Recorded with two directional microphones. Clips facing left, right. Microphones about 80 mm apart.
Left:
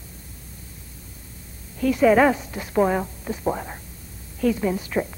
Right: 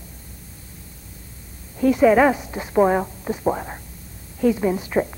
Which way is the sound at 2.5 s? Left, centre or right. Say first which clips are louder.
Right 3 dB; right.